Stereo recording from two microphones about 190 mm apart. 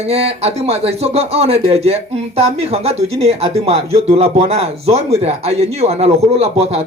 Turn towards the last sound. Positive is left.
turn(degrees=-35)  # may be behind; listen again after turning